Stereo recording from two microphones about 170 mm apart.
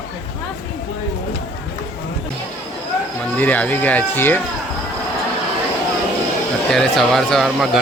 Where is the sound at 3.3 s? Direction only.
10° left (ahead or behind).